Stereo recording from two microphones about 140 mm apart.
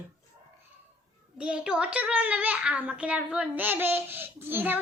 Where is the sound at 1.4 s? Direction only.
10° right (ahead or behind).